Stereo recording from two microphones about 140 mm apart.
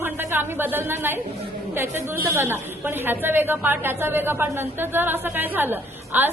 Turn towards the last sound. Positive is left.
turn(degrees=-15)  # may be behind; listen again after turning